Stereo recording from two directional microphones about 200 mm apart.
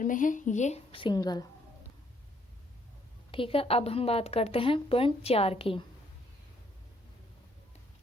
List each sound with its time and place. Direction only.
0.0 s a woman's voice: 40° left (ahead or behind); by 1.5 s 20° left (ahead or behind)
3.3 s a woman's voice: 25° left (ahead or behind)